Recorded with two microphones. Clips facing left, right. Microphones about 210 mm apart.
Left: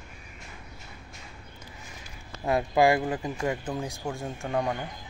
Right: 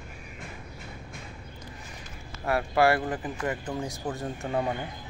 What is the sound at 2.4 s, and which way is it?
Speech, 20° left (ahead or behind).